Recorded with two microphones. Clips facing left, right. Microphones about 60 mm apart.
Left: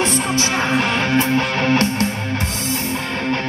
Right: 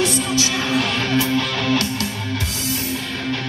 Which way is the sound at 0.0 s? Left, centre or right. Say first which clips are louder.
Left 1 dB; left.